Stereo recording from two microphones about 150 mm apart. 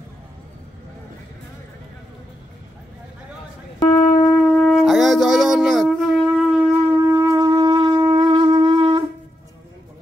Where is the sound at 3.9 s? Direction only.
70° left (ahead or behind).